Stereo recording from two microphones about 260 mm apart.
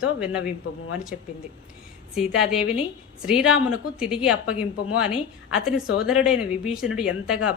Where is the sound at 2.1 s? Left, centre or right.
Centre.